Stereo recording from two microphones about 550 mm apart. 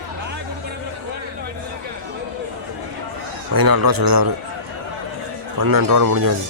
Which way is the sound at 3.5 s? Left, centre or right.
Right.